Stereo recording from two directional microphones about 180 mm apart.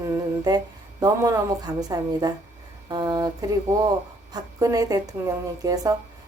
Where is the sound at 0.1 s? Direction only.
20° right (ahead or behind).